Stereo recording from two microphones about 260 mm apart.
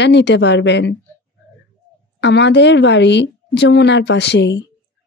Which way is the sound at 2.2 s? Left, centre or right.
Left.